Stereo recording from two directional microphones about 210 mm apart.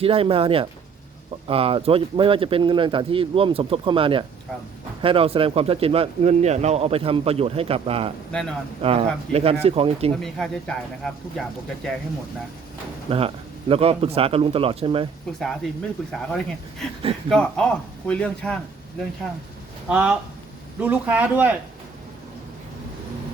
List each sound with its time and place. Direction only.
0.0 s speech: 25° right (ahead or behind)
8.3 s speech: 5° left (ahead or behind)
8.8 s speech: 25° right (ahead or behind)
10.2 s speech: centre (ahead or behind)
13.1 s speech: 25° right (ahead or behind)
15.4 s speech: centre (ahead or behind)
19.9 s speech: 5° right (ahead or behind)